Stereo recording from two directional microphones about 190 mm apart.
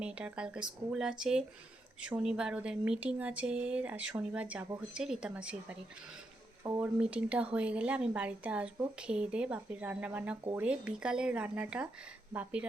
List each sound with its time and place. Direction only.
0.0 s speech: 5° right (ahead or behind)